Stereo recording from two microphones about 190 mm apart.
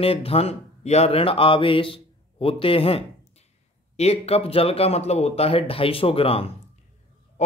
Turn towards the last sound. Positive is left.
turn(degrees=30)  # may be behind; listen again after turning